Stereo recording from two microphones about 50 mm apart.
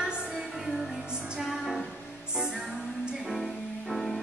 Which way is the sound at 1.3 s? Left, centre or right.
Centre.